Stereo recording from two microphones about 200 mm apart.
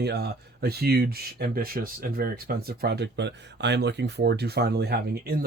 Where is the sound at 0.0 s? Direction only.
55° right (ahead or behind).